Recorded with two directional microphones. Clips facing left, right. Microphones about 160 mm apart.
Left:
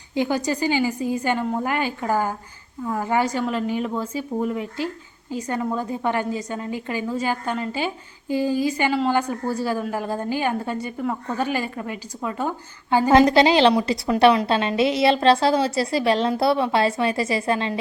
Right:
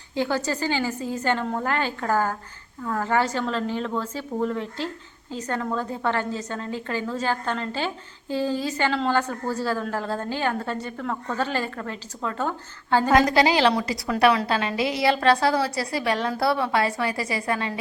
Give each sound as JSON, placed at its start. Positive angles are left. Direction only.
{"t": 0.1, "sound": "a woman's voice", "side_deg": 15}
{"t": 13.1, "sound": "a woman's voice", "side_deg": 25}